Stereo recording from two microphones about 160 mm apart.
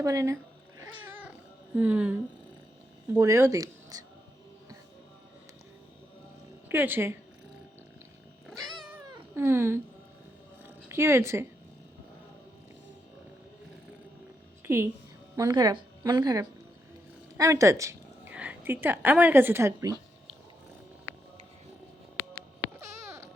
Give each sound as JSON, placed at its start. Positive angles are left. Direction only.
{"t": 0.0, "sound": "speech", "side_deg": -20}
{"t": 0.9, "sound": "cat", "side_deg": -10}
{"t": 1.7, "sound": "speech", "side_deg": -10}
{"t": 6.7, "sound": "speech", "side_deg": -15}
{"t": 9.3, "sound": "speech", "side_deg": -15}
{"t": 10.6, "sound": "a sound", "side_deg": -15}
{"t": 14.6, "sound": "a sound", "side_deg": -15}
{"t": 15.4, "sound": "speech", "side_deg": -25}
{"t": 17.3, "sound": "a sound", "side_deg": -20}
{"t": 18.3, "sound": "speech", "side_deg": -10}
{"t": 22.8, "sound": "babbling", "side_deg": -20}